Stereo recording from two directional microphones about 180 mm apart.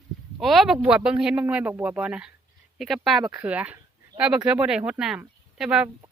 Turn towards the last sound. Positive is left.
turn(degrees=-5)  # may be behind; listen again after turning